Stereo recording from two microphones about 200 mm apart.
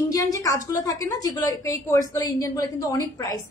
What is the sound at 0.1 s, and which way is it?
A woman's voice, 15° left (ahead or behind).